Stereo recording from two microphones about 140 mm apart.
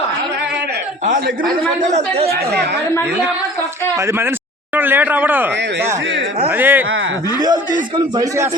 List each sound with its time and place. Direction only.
1.8 s speech: 55° right (ahead or behind)
3.9 s speech: 20° right (ahead or behind)
6.5 s speech: 15° right (ahead or behind)
7.4 s a man's voice: 30° right (ahead or behind)